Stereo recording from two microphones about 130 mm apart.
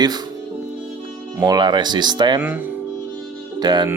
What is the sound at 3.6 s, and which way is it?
Speech, 35° right (ahead or behind).